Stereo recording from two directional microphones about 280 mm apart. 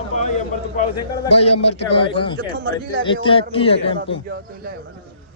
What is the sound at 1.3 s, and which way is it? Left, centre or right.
A man's voice, left.